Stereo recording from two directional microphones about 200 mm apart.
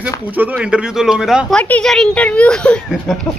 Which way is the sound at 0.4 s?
5° right (ahead or behind).